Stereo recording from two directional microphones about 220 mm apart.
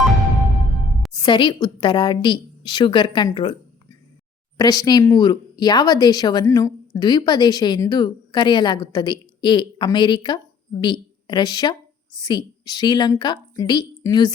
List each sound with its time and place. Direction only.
1.1 s speech: 20° left (ahead or behind)
4.5 s speech: 15° left (ahead or behind)